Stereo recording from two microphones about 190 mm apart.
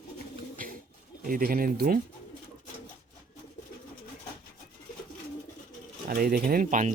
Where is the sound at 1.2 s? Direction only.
50° right (ahead or behind).